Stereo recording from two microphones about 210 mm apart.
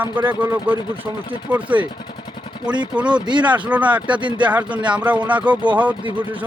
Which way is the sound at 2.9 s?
5° right (ahead or behind).